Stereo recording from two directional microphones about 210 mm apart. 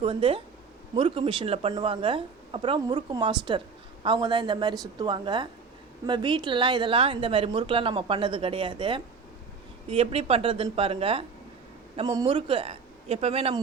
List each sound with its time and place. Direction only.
0.0 s a woman's voice: 25° right (ahead or behind)